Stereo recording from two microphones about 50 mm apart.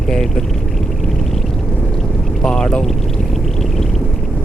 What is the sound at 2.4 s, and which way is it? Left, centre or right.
Vehicle, centre.